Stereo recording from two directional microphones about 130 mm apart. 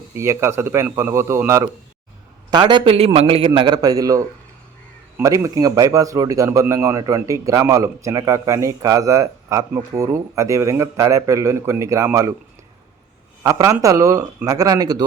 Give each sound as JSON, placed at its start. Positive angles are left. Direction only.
{"t": 0.1, "sound": "a man's voice", "side_deg": -20}
{"t": 2.5, "sound": "a man's voice", "side_deg": -35}
{"t": 13.4, "sound": "a man's voice", "side_deg": -25}